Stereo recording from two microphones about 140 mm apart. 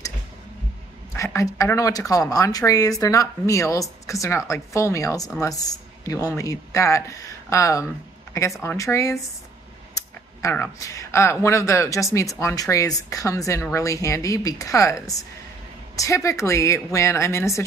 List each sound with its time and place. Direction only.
1.1 s speech: 20° left (ahead or behind)
10.5 s speech: 20° left (ahead or behind)